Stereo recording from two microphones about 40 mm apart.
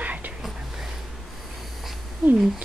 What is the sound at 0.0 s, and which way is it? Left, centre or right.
Whispering, right.